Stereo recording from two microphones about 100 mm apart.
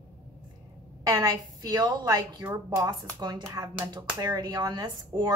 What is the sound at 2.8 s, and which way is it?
A woman's voice, 45° right (ahead or behind).